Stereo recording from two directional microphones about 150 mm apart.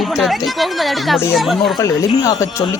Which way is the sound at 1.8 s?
20° left (ahead or behind).